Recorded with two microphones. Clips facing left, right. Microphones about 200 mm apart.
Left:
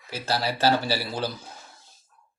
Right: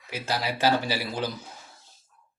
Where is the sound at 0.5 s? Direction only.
15° right (ahead or behind).